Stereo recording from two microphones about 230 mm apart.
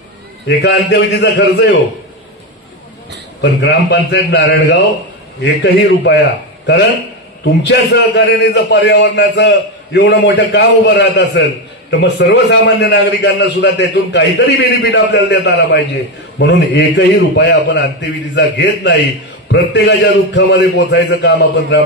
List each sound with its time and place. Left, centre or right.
0.5 s a man's voice: left
3.3 s a man's voice: left
7.4 s a man's voice: left